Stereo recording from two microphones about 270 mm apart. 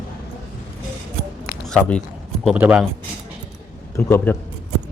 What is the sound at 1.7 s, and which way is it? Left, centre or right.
Speech, centre.